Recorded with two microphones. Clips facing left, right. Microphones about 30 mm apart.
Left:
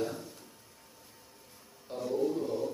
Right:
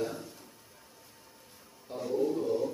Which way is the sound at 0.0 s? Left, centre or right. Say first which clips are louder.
Even; centre.